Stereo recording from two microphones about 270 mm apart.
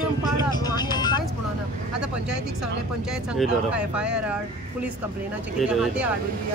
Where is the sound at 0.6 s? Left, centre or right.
Centre.